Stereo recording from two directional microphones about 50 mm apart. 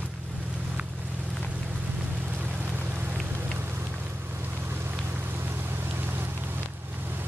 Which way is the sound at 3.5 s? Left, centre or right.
Right.